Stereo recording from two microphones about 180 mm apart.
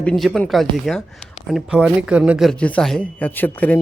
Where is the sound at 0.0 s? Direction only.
Centre (ahead or behind).